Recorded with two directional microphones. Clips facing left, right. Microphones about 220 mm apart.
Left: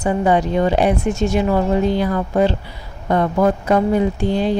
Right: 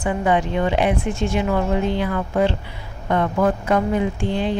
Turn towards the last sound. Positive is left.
turn(degrees=40)  # may be behind; listen again after turning